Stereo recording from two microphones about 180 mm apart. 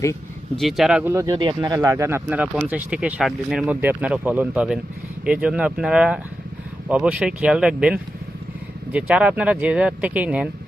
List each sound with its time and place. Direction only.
0.5 s speech: centre (ahead or behind)
1.1 s speech: 20° right (ahead or behind)